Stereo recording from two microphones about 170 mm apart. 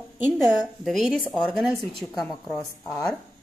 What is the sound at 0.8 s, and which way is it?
A woman's voice, centre (ahead or behind).